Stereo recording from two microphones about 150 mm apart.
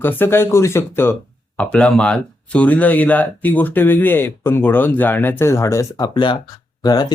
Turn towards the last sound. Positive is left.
turn(degrees=25)  # may be behind; listen again after turning